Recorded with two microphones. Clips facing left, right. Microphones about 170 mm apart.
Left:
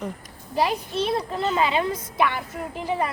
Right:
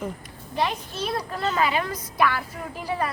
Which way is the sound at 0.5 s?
35° left (ahead or behind).